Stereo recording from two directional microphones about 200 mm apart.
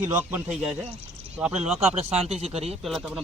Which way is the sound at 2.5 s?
30° right (ahead or behind).